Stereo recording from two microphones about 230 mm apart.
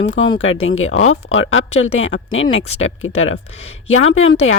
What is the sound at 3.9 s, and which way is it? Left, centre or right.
Speech, left.